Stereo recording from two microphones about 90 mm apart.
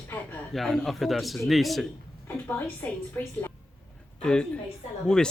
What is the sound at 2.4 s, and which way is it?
A woman's voice, 20° left (ahead or behind).